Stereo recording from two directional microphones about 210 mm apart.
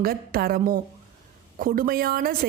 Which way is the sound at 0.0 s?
45° right (ahead or behind).